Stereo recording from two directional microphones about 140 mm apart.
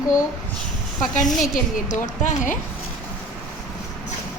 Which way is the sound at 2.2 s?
65° left (ahead or behind).